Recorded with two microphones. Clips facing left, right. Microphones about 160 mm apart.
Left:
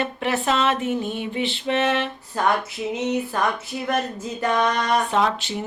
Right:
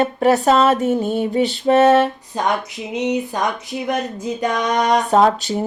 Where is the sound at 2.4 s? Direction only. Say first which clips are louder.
Right 1 dB; 20° right (ahead or behind).